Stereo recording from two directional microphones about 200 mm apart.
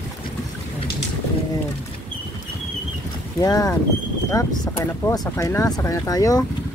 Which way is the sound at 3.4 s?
20° left (ahead or behind).